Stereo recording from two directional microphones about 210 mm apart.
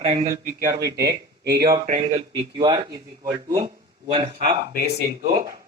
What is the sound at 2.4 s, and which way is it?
A man's voice, 20° right (ahead or behind).